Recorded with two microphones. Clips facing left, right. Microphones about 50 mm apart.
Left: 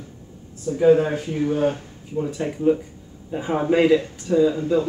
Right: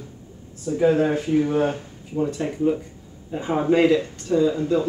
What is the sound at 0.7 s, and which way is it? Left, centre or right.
Speech, centre.